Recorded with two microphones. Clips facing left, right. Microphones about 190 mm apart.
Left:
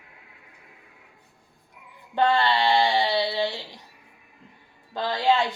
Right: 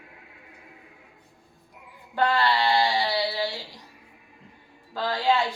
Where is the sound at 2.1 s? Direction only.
25° left (ahead or behind).